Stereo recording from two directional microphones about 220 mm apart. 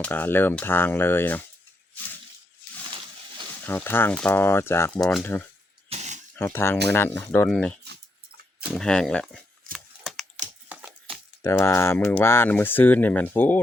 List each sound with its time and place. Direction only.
0.0 s speech: 10° left (ahead or behind)
3.6 s speech: 10° left (ahead or behind)
5.9 s a sound: 30° right (ahead or behind)
6.3 s speech: 10° left (ahead or behind)
9.7 s computer keyboard: centre (ahead or behind)
10.7 s a sound: 5° right (ahead or behind)
11.4 s speech: 10° left (ahead or behind)